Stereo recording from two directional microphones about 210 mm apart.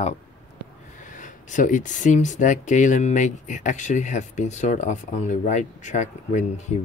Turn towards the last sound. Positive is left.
turn(degrees=35)  # may be behind; listen again after turning